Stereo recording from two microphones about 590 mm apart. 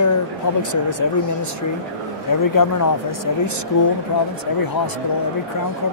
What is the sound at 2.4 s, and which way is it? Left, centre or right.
Speech, left.